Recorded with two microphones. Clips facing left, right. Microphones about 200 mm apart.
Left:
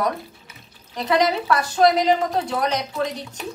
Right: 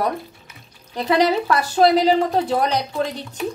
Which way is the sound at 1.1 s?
35° right (ahead or behind).